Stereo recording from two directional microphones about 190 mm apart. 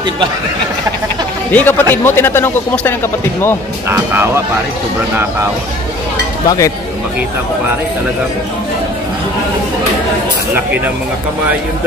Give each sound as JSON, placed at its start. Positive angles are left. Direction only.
{"t": 1.5, "sound": "speech", "side_deg": 10}
{"t": 3.9, "sound": "speech", "side_deg": -10}
{"t": 6.4, "sound": "speech", "side_deg": 20}